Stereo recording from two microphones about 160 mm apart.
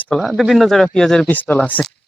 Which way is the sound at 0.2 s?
5° right (ahead or behind).